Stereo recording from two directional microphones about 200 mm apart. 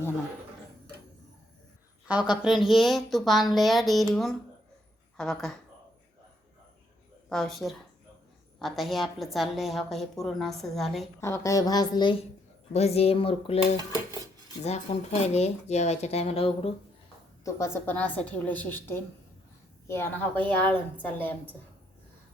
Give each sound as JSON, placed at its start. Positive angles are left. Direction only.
{"t": 2.0, "sound": "a woman's voice", "side_deg": -5}
{"t": 7.3, "sound": "a woman's voice", "side_deg": 0}
{"t": 11.2, "sound": "dishes", "side_deg": 15}
{"t": 14.6, "sound": "speech", "side_deg": 35}
{"t": 17.4, "sound": "a woman's voice", "side_deg": 10}
{"t": 20.4, "sound": "a woman's voice", "side_deg": 10}